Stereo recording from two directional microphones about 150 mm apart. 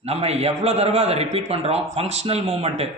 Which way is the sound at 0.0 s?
45° right (ahead or behind).